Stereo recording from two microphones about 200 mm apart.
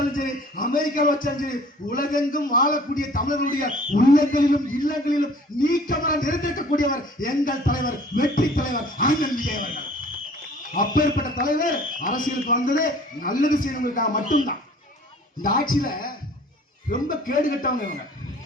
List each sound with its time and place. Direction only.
0.1 s a man's voice: 45° left (ahead or behind)